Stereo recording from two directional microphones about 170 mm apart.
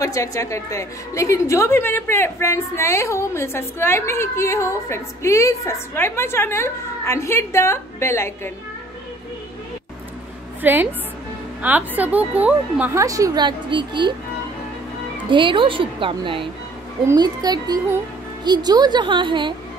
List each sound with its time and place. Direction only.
0.0 s a woman's voice: 20° left (ahead or behind)
10.6 s a woman's voice: 10° right (ahead or behind); by 14.1 s 30° right (ahead or behind)
15.2 s a woman's voice: 30° right (ahead or behind)
17.0 s a woman's voice: 20° right (ahead or behind)